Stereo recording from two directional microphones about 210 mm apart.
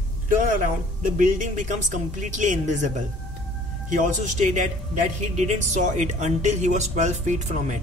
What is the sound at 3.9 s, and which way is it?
Speech, 40° right (ahead or behind).